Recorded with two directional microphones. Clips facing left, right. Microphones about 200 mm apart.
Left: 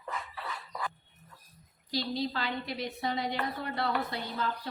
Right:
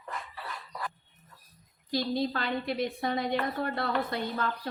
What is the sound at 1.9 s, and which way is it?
A woman's voice, 50° right (ahead or behind).